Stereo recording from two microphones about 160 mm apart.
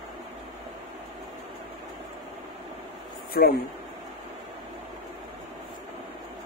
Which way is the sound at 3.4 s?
75° left (ahead or behind).